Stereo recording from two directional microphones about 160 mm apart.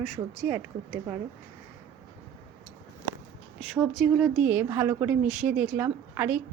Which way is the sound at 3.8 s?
Centre (ahead or behind).